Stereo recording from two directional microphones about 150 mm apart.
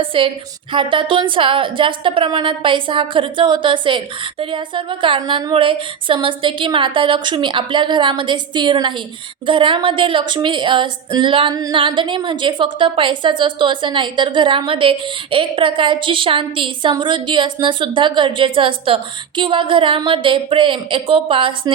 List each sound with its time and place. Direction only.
0.0 s a woman's voice: 35° right (ahead or behind)